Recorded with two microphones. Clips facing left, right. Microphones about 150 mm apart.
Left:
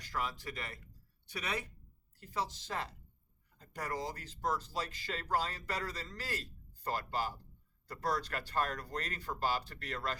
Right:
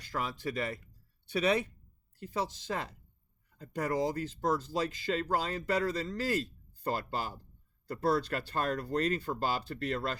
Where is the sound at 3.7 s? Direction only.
25° right (ahead or behind).